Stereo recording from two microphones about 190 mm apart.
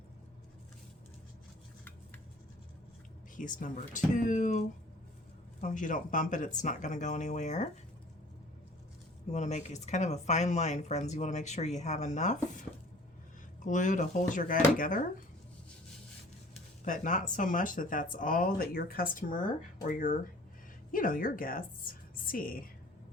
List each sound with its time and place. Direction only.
3.3 s speech: 45° left (ahead or behind)
9.3 s speech: 35° left (ahead or behind)
13.7 s speech: 40° left (ahead or behind)
16.8 s speech: 40° left (ahead or behind)